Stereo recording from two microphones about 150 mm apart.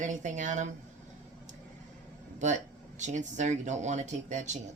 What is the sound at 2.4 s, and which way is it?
Speech, 55° right (ahead or behind).